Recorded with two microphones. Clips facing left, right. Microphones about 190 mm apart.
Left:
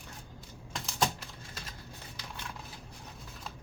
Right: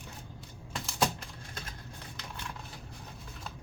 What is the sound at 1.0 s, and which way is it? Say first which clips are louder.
Typing: right 1 dB; 5° left (ahead or behind).